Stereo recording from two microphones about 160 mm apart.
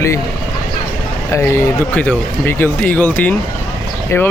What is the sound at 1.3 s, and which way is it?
Speech, 15° left (ahead or behind).